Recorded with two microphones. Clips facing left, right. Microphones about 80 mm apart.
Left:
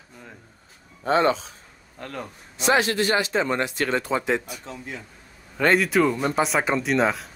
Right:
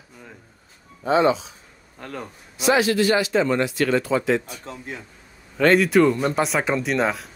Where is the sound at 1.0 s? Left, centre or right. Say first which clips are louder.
Right 2 dB; left.